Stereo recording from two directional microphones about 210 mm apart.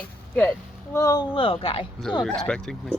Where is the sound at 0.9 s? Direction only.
15° left (ahead or behind).